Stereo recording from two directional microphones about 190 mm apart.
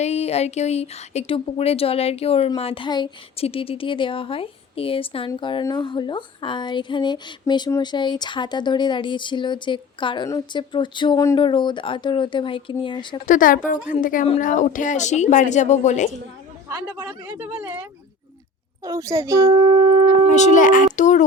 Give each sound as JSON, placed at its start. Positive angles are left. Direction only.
{"t": 0.0, "sound": "speech", "side_deg": 35}
{"t": 13.2, "sound": "speech", "side_deg": 45}
{"t": 16.6, "sound": "a child's voice", "side_deg": -15}
{"t": 18.9, "sound": "a child's voice", "side_deg": -15}
{"t": 20.3, "sound": "speech", "side_deg": 40}